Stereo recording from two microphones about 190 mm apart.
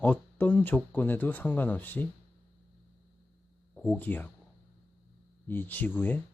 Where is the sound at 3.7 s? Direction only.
5° left (ahead or behind).